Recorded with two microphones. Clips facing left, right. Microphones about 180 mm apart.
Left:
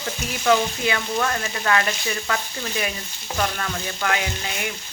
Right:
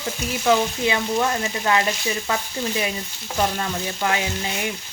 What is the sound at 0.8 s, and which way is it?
Frying, 15° right (ahead or behind).